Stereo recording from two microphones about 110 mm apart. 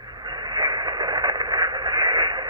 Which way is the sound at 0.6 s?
40° right (ahead or behind).